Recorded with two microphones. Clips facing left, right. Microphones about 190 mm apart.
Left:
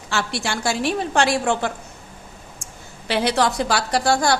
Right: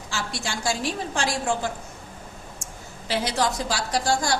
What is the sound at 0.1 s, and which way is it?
A woman's voice, 65° left (ahead or behind).